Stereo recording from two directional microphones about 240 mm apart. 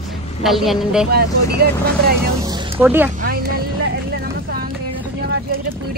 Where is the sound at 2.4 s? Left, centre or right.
Centre.